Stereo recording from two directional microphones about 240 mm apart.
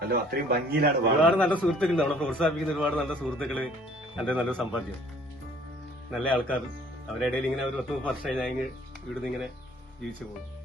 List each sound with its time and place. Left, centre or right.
0.0 s a man's voice: right
1.2 s a man's voice: centre
6.1 s a man's voice: centre